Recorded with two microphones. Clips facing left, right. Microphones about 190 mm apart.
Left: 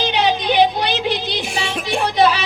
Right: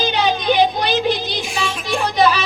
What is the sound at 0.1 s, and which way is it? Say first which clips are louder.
Music: even; 65° left (ahead or behind).